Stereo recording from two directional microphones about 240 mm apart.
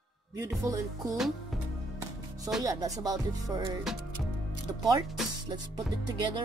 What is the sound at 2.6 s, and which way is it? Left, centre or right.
Music, centre.